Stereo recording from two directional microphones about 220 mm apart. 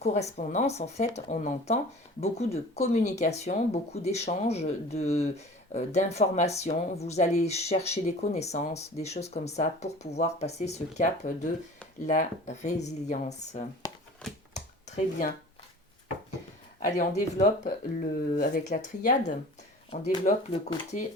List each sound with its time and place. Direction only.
0.0 s speech: 30° left (ahead or behind)
14.5 s a sound: 30° left (ahead or behind)
16.8 s speech: 35° left (ahead or behind)